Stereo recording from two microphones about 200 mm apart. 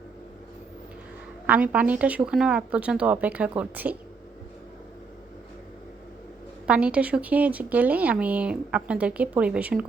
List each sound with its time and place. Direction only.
1.5 s speech: 5° right (ahead or behind)
6.7 s speech: 5° right (ahead or behind)